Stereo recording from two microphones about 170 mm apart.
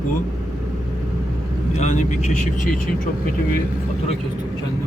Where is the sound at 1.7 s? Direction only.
45° left (ahead or behind).